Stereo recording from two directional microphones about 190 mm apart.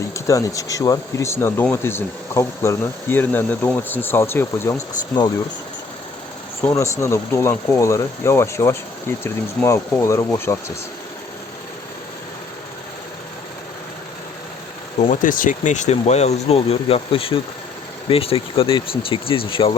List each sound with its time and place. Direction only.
0.1 s speech: 15° left (ahead or behind)
6.6 s speech: 15° left (ahead or behind)
14.9 s speech: 40° left (ahead or behind)